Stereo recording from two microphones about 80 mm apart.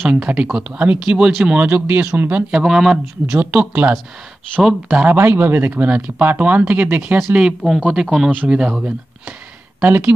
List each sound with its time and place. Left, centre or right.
0.0 s speech: centre
2.5 s speech: centre
4.6 s speech: centre
5.0 s speech: right
7.8 s speech: centre
8.3 s speech: centre
9.8 s speech: right